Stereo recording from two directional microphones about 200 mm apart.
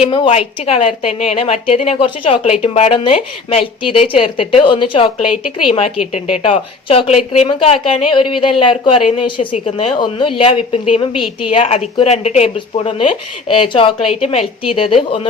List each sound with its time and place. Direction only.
0.1 s a woman's voice: 30° left (ahead or behind)